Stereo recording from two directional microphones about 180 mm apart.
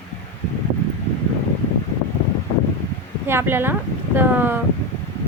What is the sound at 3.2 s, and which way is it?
Speech, 10° right (ahead or behind).